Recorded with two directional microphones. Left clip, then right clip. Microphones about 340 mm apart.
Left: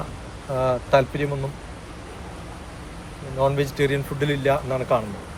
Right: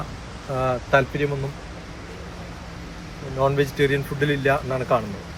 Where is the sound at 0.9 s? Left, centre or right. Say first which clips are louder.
Right 1 dB; centre.